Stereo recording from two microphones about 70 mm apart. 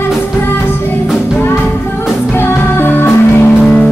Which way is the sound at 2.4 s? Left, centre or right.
Left.